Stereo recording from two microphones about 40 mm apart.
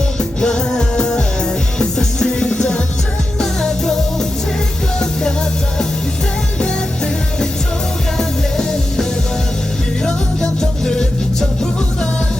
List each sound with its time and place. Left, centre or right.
0.2 s music: left
6.6 s music: left
10.4 s music: centre